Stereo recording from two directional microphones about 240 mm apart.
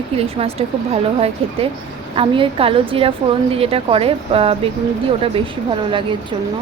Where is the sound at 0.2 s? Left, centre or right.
Right.